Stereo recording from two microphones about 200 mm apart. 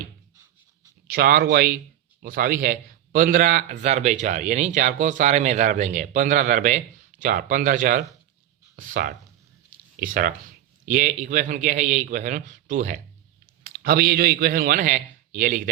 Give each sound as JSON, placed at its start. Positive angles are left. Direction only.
{"t": 1.0, "sound": "a man's voice", "side_deg": -50}
{"t": 13.7, "sound": "a man's voice", "side_deg": -50}